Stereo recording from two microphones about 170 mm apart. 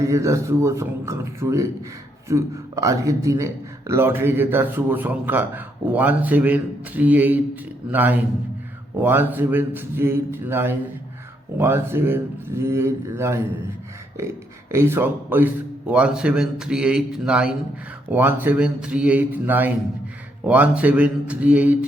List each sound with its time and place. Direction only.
0.0 s a man's voice: 15° right (ahead or behind)
14.7 s a man's voice: 15° right (ahead or behind)